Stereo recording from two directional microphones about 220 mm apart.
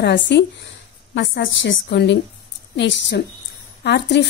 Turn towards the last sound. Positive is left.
turn(degrees=50)  # may be behind; listen again after turning